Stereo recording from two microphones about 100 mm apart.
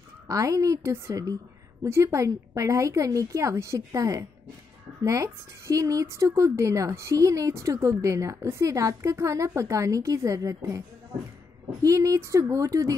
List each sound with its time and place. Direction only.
0.3 s a woman's voice: 35° right (ahead or behind)
11.8 s a woman's voice: 35° right (ahead or behind)